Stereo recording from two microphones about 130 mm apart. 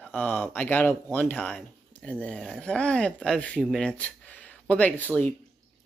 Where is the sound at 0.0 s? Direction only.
10° left (ahead or behind).